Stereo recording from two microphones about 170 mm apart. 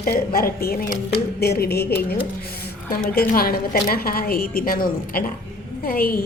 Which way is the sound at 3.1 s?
60° left (ahead or behind).